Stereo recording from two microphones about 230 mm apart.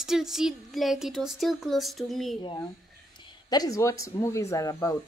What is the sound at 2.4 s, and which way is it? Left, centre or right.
Speech, centre.